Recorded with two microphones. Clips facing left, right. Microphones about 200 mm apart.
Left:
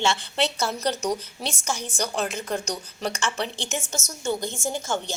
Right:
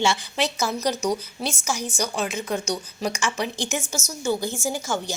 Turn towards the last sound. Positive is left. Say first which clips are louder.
# right 1 dB
turn(degrees=-5)  # may be behind; listen again after turning